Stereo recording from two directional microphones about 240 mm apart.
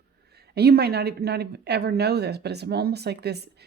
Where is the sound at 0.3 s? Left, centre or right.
Right.